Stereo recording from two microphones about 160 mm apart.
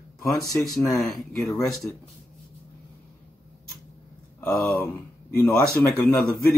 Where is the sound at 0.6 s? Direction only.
Centre (ahead or behind).